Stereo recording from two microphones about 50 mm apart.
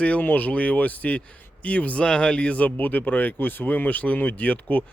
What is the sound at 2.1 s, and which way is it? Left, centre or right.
Speech, centre.